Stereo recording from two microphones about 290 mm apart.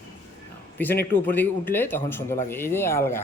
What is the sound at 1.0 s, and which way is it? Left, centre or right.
Speech, left.